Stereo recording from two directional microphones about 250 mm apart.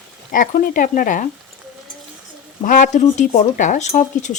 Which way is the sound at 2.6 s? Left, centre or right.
Left.